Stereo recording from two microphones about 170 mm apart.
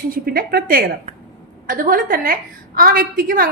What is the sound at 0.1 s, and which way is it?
A woman's voice, 60° right (ahead or behind).